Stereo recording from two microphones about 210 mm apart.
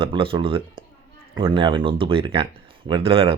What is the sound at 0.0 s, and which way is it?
Speech, 25° right (ahead or behind).